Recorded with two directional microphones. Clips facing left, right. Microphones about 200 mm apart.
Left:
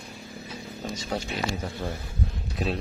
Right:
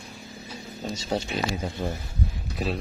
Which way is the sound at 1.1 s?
30° right (ahead or behind).